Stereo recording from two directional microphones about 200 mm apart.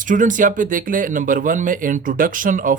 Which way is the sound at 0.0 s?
40° right (ahead or behind).